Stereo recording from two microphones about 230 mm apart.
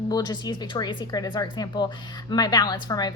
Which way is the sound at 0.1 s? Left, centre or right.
Centre.